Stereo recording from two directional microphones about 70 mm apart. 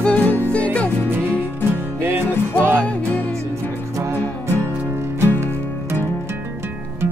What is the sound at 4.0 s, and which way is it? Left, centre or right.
Music, right.